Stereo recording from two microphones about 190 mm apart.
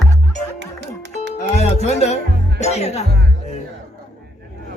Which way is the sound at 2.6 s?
35° left (ahead or behind).